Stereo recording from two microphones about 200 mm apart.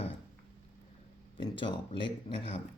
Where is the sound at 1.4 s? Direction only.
25° left (ahead or behind).